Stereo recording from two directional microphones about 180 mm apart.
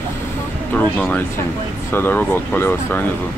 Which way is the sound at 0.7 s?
10° left (ahead or behind).